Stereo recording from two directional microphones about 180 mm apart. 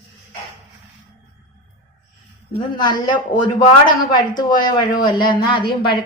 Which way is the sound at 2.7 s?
25° left (ahead or behind).